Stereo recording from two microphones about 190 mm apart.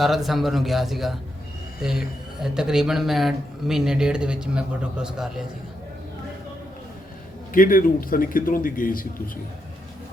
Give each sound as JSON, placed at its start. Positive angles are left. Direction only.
{"t": 0.0, "sound": "a man's voice", "side_deg": 0}
{"t": 7.5, "sound": "a man's voice", "side_deg": 45}